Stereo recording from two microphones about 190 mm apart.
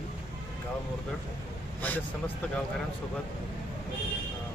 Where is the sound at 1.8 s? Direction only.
10° left (ahead or behind).